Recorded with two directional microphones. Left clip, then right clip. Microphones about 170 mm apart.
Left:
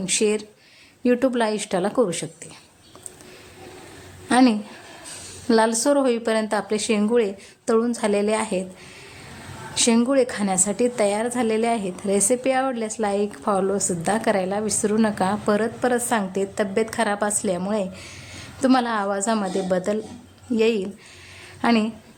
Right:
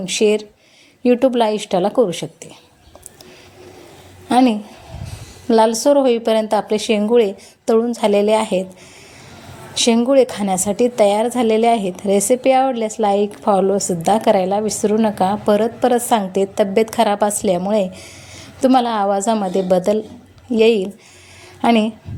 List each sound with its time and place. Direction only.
0.1 s a woman's voice: 15° right (ahead or behind)
4.3 s a woman's voice: 15° right (ahead or behind)
10.1 s a woman's voice: 20° right (ahead or behind)